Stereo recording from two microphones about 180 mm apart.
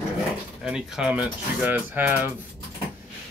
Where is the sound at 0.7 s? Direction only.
5° right (ahead or behind).